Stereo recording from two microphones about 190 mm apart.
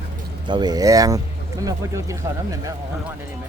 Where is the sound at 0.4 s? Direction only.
20° right (ahead or behind).